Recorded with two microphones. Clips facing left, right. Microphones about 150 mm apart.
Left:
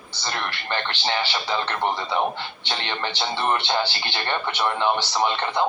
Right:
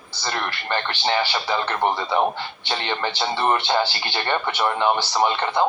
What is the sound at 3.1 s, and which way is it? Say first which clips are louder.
Speech: right 2 dB; 15° right (ahead or behind).